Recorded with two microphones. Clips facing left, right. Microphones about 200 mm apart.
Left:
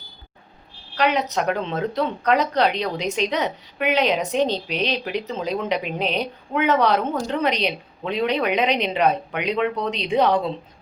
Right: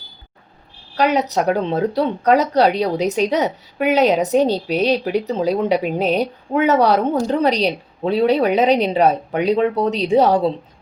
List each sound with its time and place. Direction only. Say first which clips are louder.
0.9 s speech: right 4 dB; 40° right (ahead or behind)